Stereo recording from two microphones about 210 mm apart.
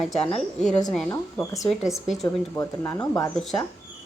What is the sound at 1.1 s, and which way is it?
Speech, 15° left (ahead or behind).